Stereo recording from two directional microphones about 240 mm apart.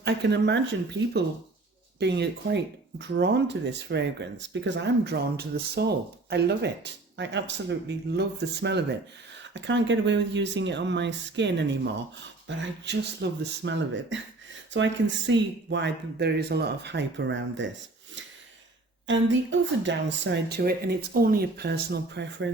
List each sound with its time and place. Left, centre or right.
0.0 s speech: right
2.0 s speech: right
19.0 s speech: right